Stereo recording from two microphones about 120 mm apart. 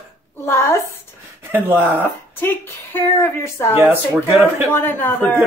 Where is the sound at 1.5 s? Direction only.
15° right (ahead or behind).